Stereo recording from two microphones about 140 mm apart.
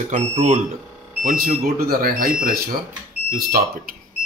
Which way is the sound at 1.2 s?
90° right.